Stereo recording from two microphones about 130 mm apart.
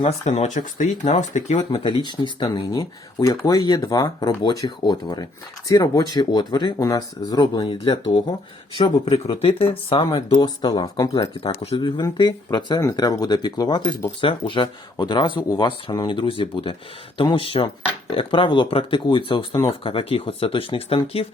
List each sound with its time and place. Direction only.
0.0 s speech: 55° left (ahead or behind)
1.5 s speech: 40° left (ahead or behind)
9.3 s speech: 45° left (ahead or behind)
10.1 s speech: 30° left (ahead or behind); by 21.2 s 50° left (ahead or behind)